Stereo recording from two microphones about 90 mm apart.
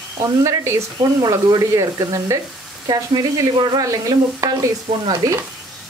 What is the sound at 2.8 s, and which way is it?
Speech, 55° right (ahead or behind).